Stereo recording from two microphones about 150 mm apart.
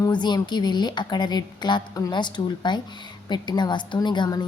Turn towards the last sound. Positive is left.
turn(degrees=30)  # may be behind; listen again after turning